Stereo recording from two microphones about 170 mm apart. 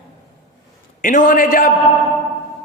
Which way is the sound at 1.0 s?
50° left (ahead or behind).